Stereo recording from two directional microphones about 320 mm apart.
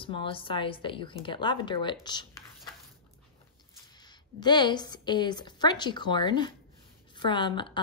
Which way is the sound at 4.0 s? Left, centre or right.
Centre.